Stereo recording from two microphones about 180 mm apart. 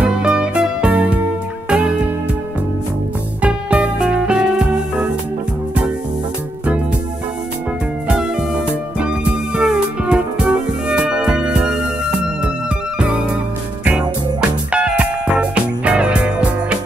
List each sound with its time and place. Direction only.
0.0 s music: 5° right (ahead or behind)
3.4 s music: 10° right (ahead or behind)
8.1 s music: 5° right (ahead or behind)
13.0 s music: 5° right (ahead or behind)
14.7 s music: 5° right (ahead or behind)